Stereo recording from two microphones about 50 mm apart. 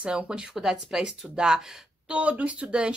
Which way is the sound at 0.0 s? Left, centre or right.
Right.